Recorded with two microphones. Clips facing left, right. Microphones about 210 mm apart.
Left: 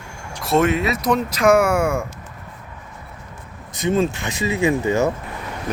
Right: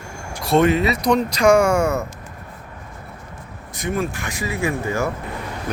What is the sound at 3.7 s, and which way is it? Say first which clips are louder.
Speech: left 5 dB; 20° left (ahead or behind).